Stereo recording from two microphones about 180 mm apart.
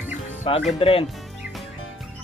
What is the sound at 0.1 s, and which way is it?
Music, 40° left (ahead or behind).